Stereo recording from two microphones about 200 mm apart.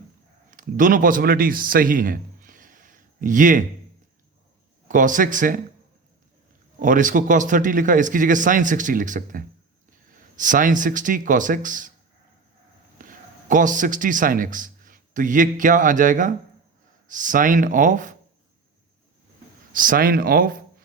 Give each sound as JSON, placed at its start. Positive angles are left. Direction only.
{"t": 0.5, "sound": "a man's voice", "side_deg": -40}
{"t": 4.9, "sound": "speech", "side_deg": -40}
{"t": 6.8, "sound": "speech", "side_deg": -40}
{"t": 13.1, "sound": "a man's voice", "side_deg": -40}
{"t": 19.7, "sound": "speech", "side_deg": -45}